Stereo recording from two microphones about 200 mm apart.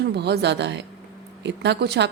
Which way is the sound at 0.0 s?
55° right (ahead or behind).